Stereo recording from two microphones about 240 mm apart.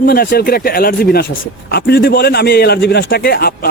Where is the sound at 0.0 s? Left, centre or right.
Left.